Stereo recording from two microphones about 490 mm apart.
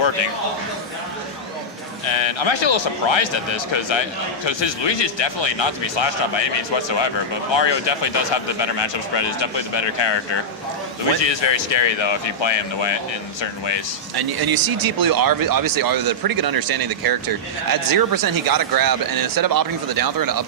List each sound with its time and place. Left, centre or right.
2.0 s speech: left
14.2 s speech: right